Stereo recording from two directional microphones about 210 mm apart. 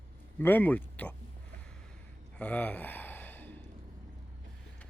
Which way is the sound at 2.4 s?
5° left (ahead or behind).